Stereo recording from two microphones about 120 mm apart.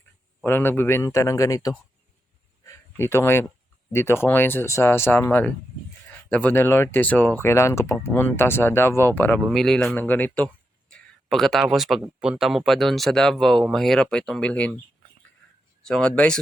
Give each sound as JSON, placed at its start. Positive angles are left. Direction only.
{"t": 0.4, "sound": "speech", "side_deg": 20}
{"t": 2.6, "sound": "a sound", "side_deg": 20}
{"t": 3.9, "sound": "speech", "side_deg": 20}
{"t": 9.5, "sound": "speech", "side_deg": 0}
{"t": 9.9, "sound": "speech", "side_deg": 15}
{"t": 15.8, "sound": "speech", "side_deg": 5}